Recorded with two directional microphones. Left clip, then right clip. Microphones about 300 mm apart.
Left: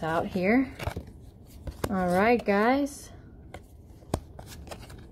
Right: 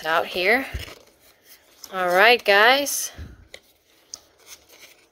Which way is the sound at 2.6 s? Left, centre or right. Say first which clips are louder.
Right 8 dB; right.